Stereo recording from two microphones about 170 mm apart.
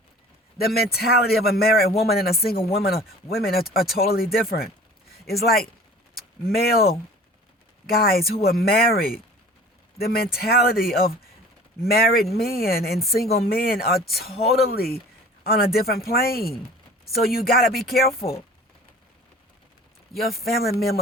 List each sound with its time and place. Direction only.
0.6 s speech: 65° left (ahead or behind)